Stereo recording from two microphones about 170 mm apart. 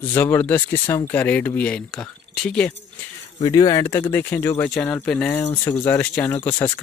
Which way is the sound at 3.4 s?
20° left (ahead or behind).